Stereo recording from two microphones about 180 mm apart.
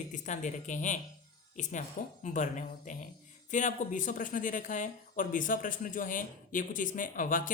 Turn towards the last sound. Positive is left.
turn(degrees=45)  # may be behind; listen again after turning